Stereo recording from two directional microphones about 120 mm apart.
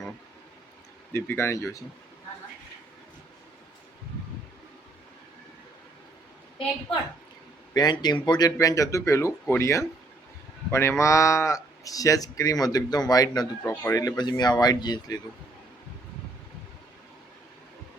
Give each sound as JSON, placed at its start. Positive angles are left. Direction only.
{"t": 1.1, "sound": "speech", "side_deg": 20}
{"t": 7.7, "sound": "speech", "side_deg": 35}